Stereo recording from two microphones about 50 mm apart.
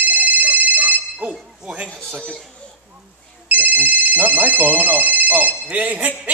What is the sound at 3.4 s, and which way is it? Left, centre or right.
Speech, right.